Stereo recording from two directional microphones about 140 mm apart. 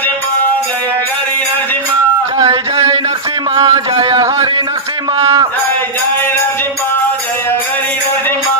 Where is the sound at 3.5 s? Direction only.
35° right (ahead or behind).